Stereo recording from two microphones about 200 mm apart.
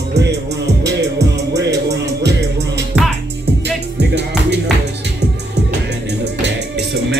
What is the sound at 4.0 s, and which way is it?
Music, 55° right (ahead or behind).